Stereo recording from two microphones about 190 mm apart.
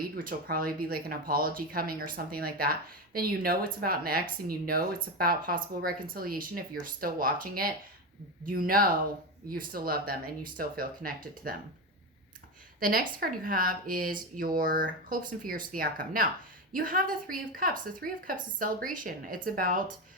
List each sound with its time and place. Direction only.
0.0 s speech: 50° right (ahead or behind)
12.8 s speech: 50° right (ahead or behind)